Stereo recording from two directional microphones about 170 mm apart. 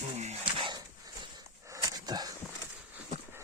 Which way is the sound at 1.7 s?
20° right (ahead or behind).